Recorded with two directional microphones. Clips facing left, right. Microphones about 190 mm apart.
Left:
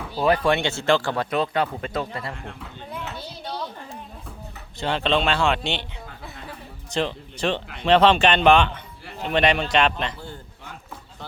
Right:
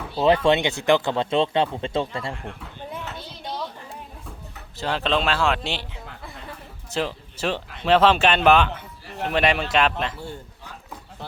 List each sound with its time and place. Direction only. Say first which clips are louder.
0.2 s speech: right 2 dB; 25° right (ahead or behind)
4.8 s speech: left 1 dB; centre (ahead or behind)
6.9 s speech: left 1 dB; 5° right (ahead or behind)